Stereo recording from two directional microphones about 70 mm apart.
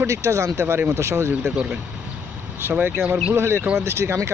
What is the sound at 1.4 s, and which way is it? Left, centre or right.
Speech, centre.